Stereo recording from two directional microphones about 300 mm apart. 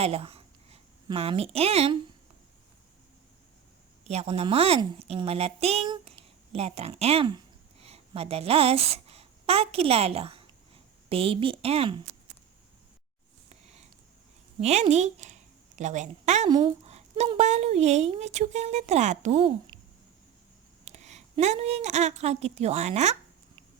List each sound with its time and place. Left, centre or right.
0.0 s speech: centre
4.1 s a woman's voice: centre
13.5 s a sound: right
14.6 s speech: right
20.8 s a woman's voice: right